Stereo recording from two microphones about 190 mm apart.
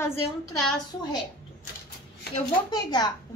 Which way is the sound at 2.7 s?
20° left (ahead or behind).